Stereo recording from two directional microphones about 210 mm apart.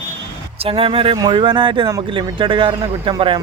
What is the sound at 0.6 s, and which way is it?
Speech, 25° right (ahead or behind).